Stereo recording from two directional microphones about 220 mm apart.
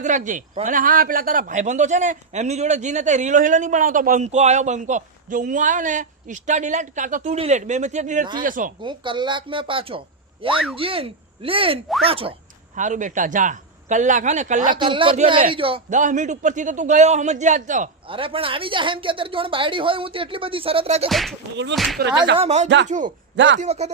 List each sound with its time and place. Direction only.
0.0 s a man's voice: 35° right (ahead or behind)
8.8 s a man's voice: 20° right (ahead or behind)
14.7 s speech: 20° right (ahead or behind)
15.5 s speech: 25° right (ahead or behind)
21.1 s speech: centre (ahead or behind)
22.0 s speech: 45° right (ahead or behind)
22.4 s a man's voice: 30° right (ahead or behind)